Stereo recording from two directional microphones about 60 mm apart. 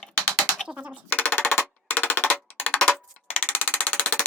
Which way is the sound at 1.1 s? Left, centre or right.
Left.